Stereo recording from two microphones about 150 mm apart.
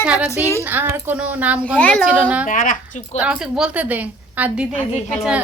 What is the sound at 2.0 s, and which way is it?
Speech, 10° right (ahead or behind).